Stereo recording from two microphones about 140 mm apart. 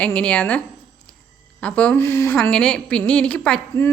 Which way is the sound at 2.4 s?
5° left (ahead or behind).